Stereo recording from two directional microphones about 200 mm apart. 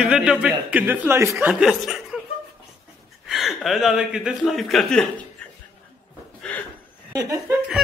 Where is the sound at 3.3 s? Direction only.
Centre (ahead or behind).